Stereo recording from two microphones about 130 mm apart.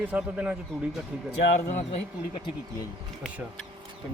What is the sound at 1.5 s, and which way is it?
Speech, 65° left (ahead or behind).